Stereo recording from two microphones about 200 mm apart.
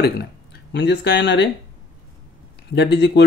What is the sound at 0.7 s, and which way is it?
Speech, 55° left (ahead or behind).